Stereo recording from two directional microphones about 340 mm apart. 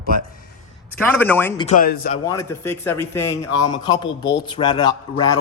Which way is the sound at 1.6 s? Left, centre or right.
Left.